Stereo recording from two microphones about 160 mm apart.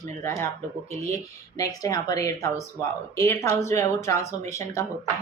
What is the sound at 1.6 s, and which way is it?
Speech, 20° left (ahead or behind).